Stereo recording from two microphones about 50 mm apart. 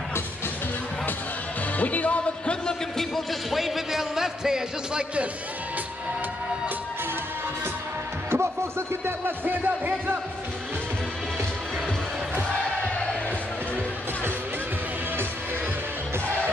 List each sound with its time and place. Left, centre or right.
1.8 s music: left
3.0 s speech: centre
8.3 s speech: right